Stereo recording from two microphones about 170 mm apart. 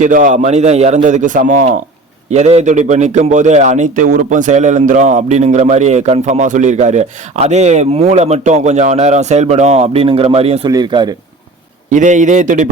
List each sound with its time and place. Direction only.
0.0 s a man's voice: 50° right (ahead or behind)
10.7 s speech: 25° right (ahead or behind)
11.9 s a man's voice: 45° right (ahead or behind)